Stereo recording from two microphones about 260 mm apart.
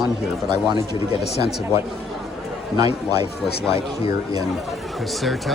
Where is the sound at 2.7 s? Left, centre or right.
Centre.